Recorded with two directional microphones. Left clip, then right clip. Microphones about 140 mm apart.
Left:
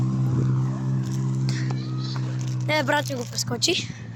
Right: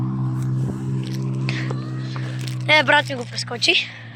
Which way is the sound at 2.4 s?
25° right (ahead or behind).